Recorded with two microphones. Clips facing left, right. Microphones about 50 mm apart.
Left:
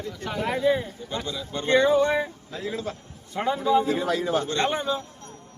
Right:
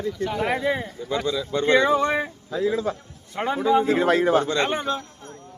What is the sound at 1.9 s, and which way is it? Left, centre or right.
Speech, right.